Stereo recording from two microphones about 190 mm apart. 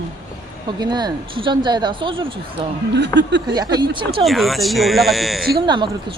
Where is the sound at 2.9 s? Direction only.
65° right (ahead or behind).